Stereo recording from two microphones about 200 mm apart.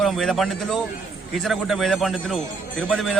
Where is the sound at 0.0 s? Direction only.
Centre (ahead or behind).